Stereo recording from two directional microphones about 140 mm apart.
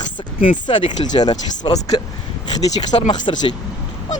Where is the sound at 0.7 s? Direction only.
30° left (ahead or behind).